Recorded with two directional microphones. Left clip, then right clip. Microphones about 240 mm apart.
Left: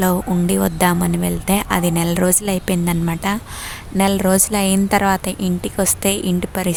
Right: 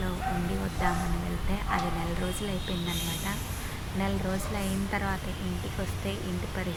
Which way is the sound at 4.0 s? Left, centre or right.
Left.